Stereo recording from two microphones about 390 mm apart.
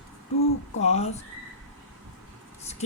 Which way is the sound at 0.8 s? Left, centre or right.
Centre.